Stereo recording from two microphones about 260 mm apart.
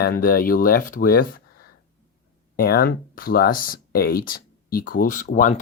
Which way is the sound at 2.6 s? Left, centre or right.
Left.